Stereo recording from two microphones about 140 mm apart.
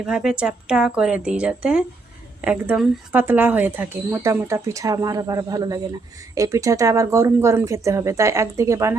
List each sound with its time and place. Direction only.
0.0 s a woman's voice: 5° right (ahead or behind); by 9.0 s 20° right (ahead or behind)